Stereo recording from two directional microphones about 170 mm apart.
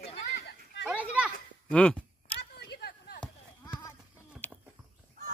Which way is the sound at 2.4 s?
80° left.